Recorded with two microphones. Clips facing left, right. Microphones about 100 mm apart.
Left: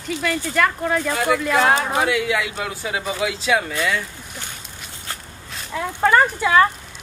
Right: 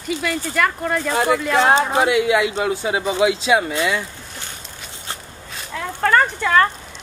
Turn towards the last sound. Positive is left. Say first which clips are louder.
# left 1 dB
turn(degrees=5)  # may be behind; listen again after turning